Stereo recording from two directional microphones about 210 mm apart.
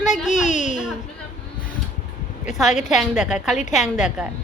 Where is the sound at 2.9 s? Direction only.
Centre (ahead or behind).